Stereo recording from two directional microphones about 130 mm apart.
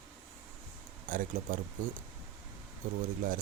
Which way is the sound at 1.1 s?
90° right.